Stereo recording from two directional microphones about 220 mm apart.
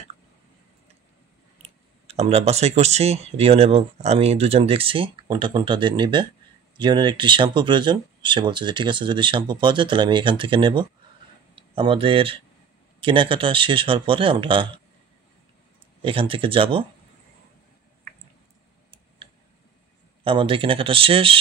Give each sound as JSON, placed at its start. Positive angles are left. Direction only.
{"t": 1.6, "sound": "speech", "side_deg": -30}
{"t": 16.0, "sound": "speech", "side_deg": -25}
{"t": 20.2, "sound": "speech", "side_deg": -25}